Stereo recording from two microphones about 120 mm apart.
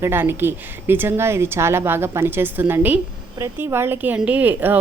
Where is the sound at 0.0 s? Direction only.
20° right (ahead or behind).